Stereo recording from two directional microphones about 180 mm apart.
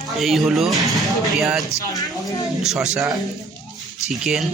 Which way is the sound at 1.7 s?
20° left (ahead or behind).